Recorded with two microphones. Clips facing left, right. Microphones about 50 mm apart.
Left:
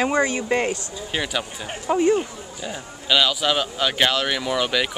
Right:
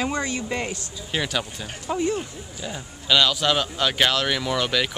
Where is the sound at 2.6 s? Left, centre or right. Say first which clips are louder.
Left 1 dB; centre.